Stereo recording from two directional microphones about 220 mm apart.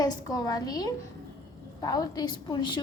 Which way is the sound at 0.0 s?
15° left (ahead or behind).